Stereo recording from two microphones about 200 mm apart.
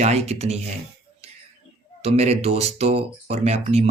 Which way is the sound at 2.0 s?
30° right (ahead or behind).